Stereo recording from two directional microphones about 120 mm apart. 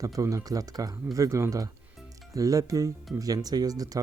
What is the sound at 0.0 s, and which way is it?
Speech, 30° right (ahead or behind).